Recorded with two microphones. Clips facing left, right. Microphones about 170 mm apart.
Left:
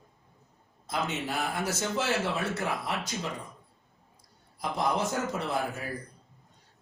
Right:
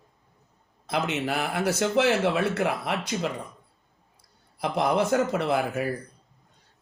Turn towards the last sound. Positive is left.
turn(degrees=-70)  # may be behind; listen again after turning